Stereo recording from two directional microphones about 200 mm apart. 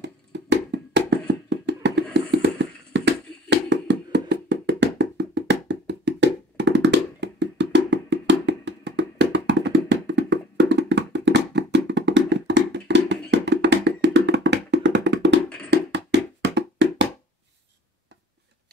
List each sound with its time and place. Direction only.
0.0 s hands: 60° right (ahead or behind)
15.7 s wood block: 60° right (ahead or behind)